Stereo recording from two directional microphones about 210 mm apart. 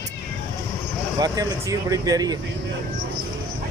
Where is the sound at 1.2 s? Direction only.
15° right (ahead or behind).